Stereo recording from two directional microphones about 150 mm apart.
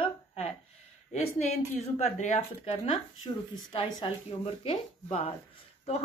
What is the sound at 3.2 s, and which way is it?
Speech, 25° left (ahead or behind).